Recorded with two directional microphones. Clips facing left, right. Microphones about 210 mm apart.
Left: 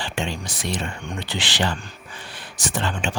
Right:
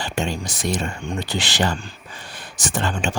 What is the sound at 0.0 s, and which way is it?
Speech, 45° right (ahead or behind).